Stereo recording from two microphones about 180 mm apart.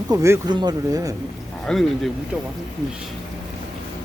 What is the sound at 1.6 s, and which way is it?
Speech, 5° left (ahead or behind).